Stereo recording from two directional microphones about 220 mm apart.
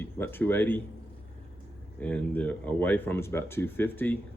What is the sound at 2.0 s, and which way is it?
Speech, 5° left (ahead or behind).